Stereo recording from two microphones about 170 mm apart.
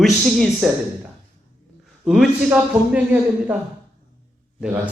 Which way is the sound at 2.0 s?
Centre (ahead or behind).